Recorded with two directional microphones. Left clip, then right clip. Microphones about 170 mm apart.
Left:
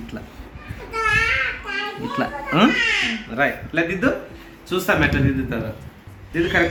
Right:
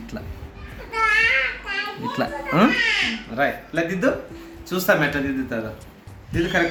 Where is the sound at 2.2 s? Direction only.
10° right (ahead or behind).